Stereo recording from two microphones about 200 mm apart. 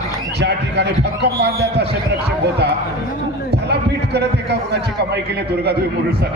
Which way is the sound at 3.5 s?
55° right (ahead or behind).